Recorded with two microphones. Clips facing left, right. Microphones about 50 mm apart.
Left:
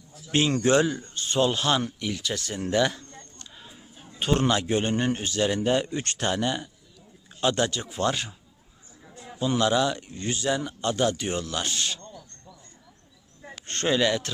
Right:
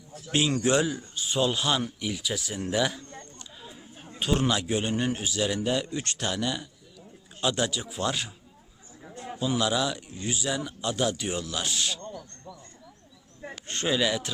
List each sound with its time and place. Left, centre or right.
0.3 s a man's voice: centre
3.1 s a sound: centre
4.4 s a man's voice: centre
5.7 s speech: centre
6.0 s speech: centre
7.5 s a man's voice: centre
9.1 s a sound: right
9.4 s a man's voice: centre
13.7 s a man's voice: centre